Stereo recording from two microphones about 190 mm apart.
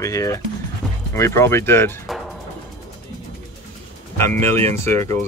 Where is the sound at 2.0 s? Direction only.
Centre (ahead or behind).